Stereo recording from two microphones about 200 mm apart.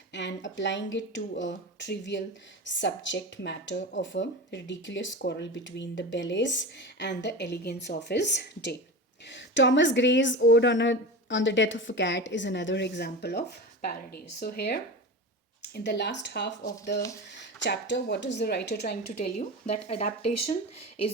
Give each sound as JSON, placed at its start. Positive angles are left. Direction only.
{"t": 0.1, "sound": "a woman's voice", "side_deg": 60}
{"t": 19.6, "sound": "speech", "side_deg": 35}